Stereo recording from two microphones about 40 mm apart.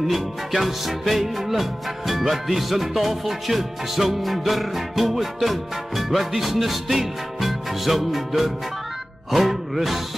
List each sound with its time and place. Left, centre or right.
0.6 s music: centre